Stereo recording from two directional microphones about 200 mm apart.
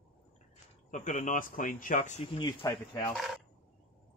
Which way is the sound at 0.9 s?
40° left (ahead or behind).